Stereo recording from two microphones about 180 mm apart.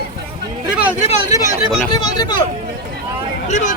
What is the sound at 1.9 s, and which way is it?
Speech, 25° left (ahead or behind).